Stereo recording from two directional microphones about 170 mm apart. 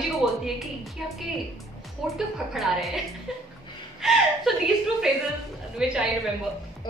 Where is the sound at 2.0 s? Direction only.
Centre (ahead or behind).